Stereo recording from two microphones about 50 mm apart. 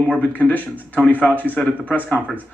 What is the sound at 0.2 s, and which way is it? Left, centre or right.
Speech, left.